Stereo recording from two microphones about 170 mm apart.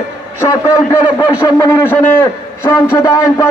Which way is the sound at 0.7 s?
15° left (ahead or behind).